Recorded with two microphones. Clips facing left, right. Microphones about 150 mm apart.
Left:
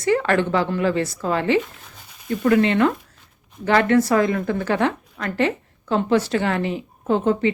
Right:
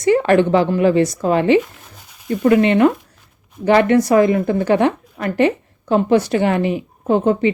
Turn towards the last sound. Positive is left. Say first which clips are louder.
# right 4 dB
turn(degrees=-15)  # may be behind; listen again after turning